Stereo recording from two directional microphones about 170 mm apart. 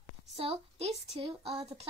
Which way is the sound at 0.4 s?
35° right (ahead or behind).